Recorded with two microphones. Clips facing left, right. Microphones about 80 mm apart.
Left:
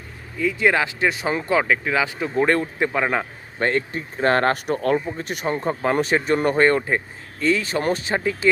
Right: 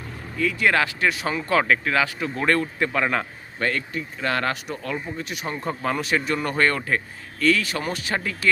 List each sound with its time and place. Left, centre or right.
0.3 s speech: centre
1.6 s speech: centre
3.6 s speech: left